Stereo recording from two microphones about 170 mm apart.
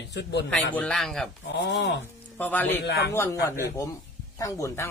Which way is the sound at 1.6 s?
90° left.